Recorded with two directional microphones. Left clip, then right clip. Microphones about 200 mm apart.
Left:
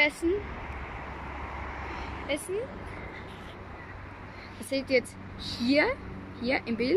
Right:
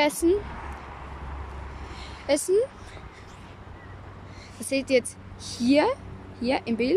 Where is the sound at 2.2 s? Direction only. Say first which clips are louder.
Right 10 dB; 25° right (ahead or behind).